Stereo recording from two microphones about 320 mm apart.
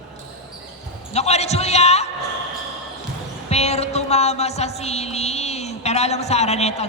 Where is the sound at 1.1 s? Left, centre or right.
Centre.